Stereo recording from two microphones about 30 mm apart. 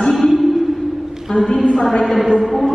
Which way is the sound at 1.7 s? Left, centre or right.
Left.